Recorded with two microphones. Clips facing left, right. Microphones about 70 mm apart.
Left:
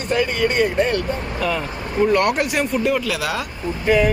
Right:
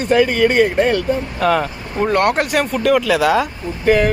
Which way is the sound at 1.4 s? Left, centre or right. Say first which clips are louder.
Right 7 dB; right.